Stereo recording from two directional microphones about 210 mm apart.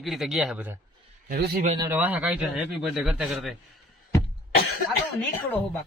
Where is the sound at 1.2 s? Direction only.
45° right (ahead or behind).